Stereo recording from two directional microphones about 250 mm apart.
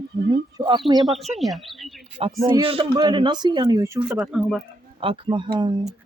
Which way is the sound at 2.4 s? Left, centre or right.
Right.